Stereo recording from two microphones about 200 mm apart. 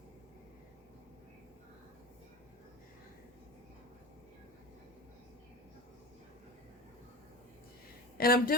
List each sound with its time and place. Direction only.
8.2 s a woman's voice: 45° left (ahead or behind)